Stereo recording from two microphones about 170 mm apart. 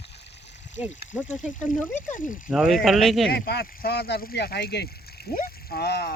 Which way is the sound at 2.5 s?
5° right (ahead or behind).